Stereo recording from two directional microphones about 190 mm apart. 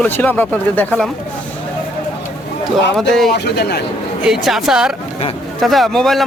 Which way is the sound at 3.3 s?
60° left (ahead or behind).